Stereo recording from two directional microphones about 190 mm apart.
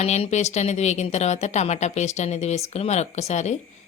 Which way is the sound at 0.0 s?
35° left (ahead or behind).